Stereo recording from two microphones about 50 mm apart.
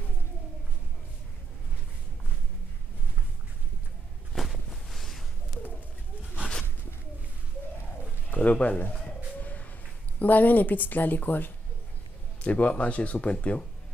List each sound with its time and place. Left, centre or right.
4.3 s a sound: centre
8.3 s speech: left
9.4 s shuffle: left
10.1 s speech: left
12.4 s speech: left